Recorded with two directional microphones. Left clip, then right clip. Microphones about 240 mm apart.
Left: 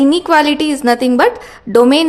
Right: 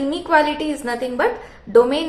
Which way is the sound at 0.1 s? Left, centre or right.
Left.